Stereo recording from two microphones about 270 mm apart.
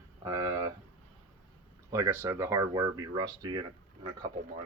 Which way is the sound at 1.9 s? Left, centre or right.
Centre.